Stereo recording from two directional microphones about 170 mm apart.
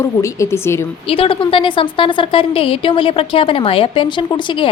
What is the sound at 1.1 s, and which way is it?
A woman's voice, 30° left (ahead or behind).